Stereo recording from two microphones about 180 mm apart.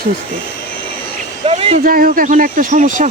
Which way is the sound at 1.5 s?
35° right (ahead or behind).